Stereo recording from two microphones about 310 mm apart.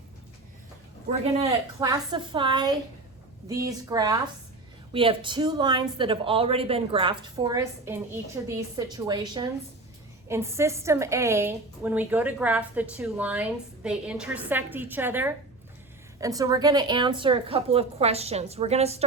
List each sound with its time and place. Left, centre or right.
1.4 s a woman's voice: centre